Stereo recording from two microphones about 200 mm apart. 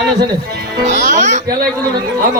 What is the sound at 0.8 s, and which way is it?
Speech, 40° right (ahead or behind).